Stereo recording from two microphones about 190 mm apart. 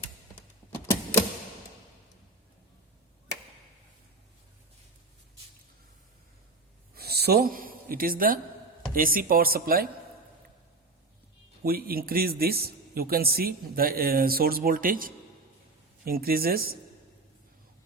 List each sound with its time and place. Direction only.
0.7 s typewriter: 10° left (ahead or behind)
6.9 s a sound: 55° right (ahead or behind)
8.9 s speech: 50° right (ahead or behind)
11.6 s speech: 50° right (ahead or behind)